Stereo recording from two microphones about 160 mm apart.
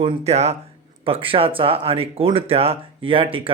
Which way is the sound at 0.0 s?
40° right (ahead or behind).